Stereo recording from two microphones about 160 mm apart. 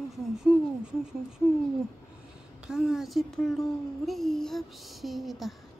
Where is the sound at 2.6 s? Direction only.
5° right (ahead or behind).